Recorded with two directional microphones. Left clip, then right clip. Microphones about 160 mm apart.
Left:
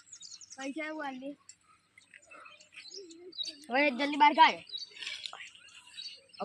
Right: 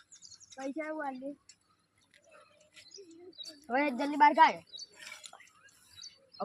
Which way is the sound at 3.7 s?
15° right (ahead or behind).